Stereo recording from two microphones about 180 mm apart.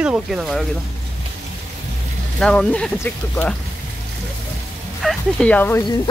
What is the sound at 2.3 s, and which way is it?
Speech, 5° left (ahead or behind).